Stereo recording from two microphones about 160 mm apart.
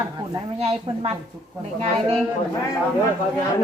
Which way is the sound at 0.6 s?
40° right (ahead or behind).